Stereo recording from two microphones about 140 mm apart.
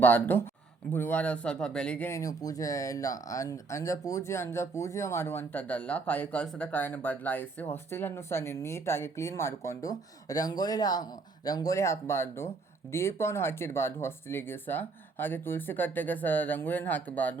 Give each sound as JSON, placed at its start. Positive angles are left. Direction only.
{"t": 0.0, "sound": "speech", "side_deg": 15}
{"t": 2.0, "sound": "speech", "side_deg": 25}